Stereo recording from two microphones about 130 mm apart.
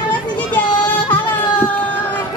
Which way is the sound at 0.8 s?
15° left (ahead or behind).